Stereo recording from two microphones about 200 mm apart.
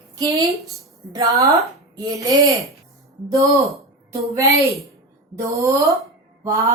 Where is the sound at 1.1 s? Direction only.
15° right (ahead or behind).